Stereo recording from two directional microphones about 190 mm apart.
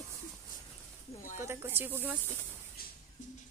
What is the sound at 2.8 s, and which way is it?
Music, 50° left (ahead or behind).